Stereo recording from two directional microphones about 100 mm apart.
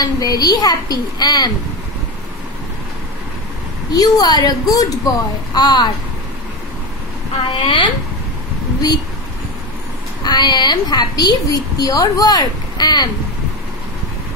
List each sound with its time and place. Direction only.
0.0 s a woman's voice: 40° left (ahead or behind)
3.9 s a woman's voice: 40° left (ahead or behind)
7.6 s a woman's voice: 50° left (ahead or behind)
10.2 s a woman's voice: 45° left (ahead or behind)